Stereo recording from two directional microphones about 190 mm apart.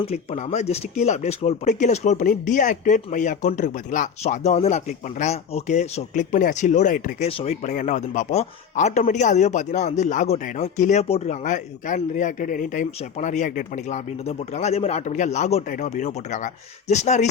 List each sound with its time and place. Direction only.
0.1 s speech: 35° left (ahead or behind)